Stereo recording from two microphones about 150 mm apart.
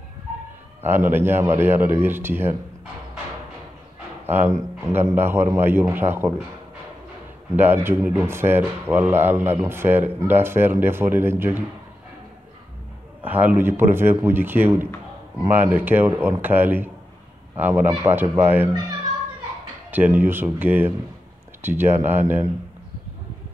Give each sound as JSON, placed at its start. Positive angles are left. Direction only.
{"t": 0.8, "sound": "speech", "side_deg": -15}
{"t": 4.3, "sound": "speech", "side_deg": -15}
{"t": 7.5, "sound": "speech", "side_deg": -15}
{"t": 13.2, "sound": "speech", "side_deg": -10}
{"t": 19.9, "sound": "speech", "side_deg": -10}